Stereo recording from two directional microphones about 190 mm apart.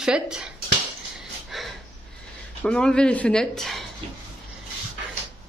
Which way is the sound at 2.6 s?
5° left (ahead or behind).